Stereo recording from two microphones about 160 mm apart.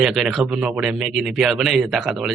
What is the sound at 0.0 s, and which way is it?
Speech, centre (ahead or behind).